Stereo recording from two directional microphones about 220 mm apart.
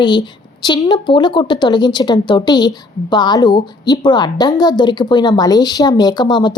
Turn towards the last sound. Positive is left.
turn(degrees=20)  # may be behind; listen again after turning